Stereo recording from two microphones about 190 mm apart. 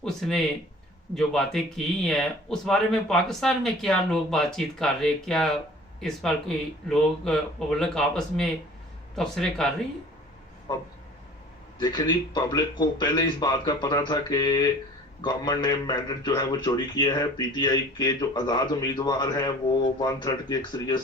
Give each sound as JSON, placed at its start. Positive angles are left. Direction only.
{"t": 0.0, "sound": "speech", "side_deg": 0}
{"t": 11.8, "sound": "a man's voice", "side_deg": 20}